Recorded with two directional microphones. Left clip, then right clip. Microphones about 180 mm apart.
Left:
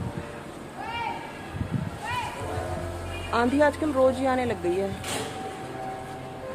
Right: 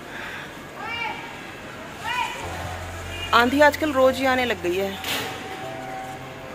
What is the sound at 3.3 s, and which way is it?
A woman's voice, 5° left (ahead or behind).